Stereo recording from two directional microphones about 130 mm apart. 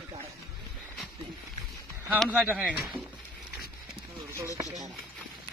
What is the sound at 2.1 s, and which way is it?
Speech, 5° right (ahead or behind).